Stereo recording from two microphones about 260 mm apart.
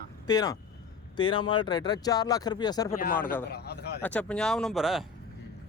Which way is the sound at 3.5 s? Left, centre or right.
Left.